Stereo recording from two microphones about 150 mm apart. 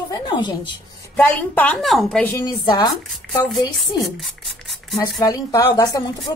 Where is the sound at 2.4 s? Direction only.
30° left (ahead or behind).